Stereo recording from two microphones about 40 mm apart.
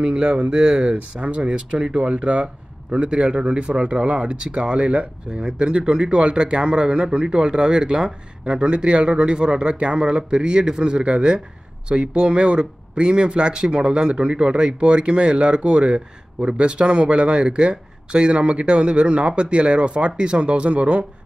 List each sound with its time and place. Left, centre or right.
0.0 s a man's voice: right